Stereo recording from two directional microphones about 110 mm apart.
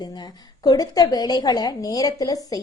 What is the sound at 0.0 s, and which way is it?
A woman's voice, 40° left (ahead or behind).